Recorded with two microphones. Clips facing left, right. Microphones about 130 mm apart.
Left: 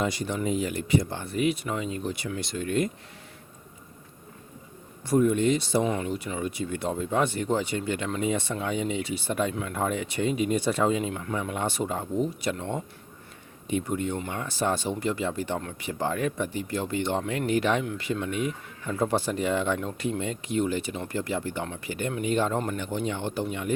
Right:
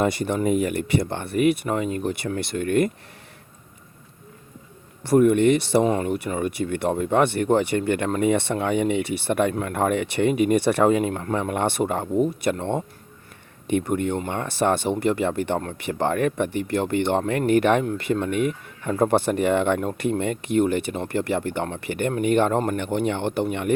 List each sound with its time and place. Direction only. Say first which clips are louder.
0.0 s speech: right 6 dB; 60° right (ahead or behind)
5.0 s speech: right 6 dB; 65° right (ahead or behind)
5.8 s speech: right 6 dB; 50° right (ahead or behind); by 23.7 s 65° right (ahead or behind)